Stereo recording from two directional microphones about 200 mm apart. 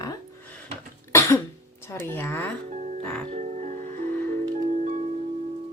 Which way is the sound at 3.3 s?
35° right (ahead or behind).